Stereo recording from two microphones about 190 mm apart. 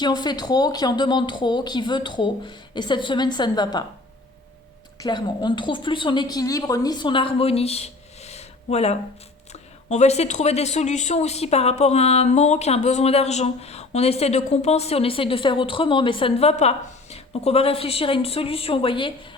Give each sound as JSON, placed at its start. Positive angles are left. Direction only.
{"t": 0.0, "sound": "speech", "side_deg": 20}
{"t": 4.9, "sound": "a woman's voice", "side_deg": 25}